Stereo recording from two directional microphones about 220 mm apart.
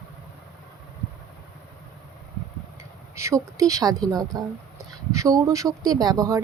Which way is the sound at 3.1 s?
15° right (ahead or behind).